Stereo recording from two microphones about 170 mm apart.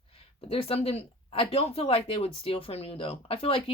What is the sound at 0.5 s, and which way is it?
Speech, 35° left (ahead or behind).